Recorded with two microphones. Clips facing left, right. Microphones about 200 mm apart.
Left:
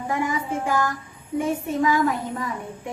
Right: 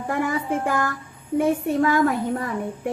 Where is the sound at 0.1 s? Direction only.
55° right (ahead or behind).